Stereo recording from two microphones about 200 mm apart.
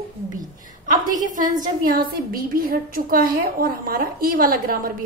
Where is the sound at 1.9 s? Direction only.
45° right (ahead or behind).